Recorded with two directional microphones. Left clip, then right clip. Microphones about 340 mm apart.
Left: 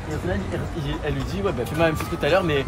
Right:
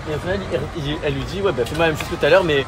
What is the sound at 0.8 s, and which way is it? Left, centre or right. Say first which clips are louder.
Speech: right 5 dB; centre.